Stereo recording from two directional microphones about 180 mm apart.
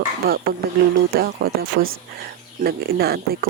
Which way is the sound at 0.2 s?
55° right (ahead or behind).